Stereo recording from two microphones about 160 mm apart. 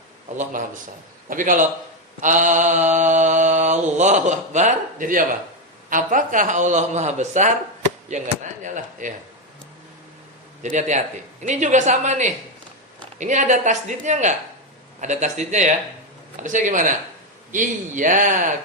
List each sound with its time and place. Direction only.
1.3 s a man's voice: 55° right (ahead or behind)
2.2 s mantra: 50° right (ahead or behind)
10.6 s mantra: 50° right (ahead or behind)